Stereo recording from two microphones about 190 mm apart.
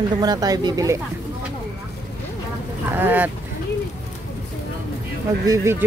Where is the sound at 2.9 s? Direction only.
10° right (ahead or behind).